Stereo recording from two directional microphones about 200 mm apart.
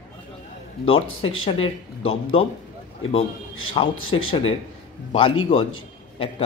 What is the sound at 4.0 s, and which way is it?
Speech, 90° left.